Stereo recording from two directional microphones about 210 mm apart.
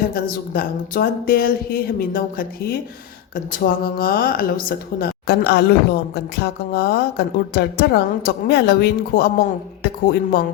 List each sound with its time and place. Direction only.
0.1 s speech: 45° left (ahead or behind)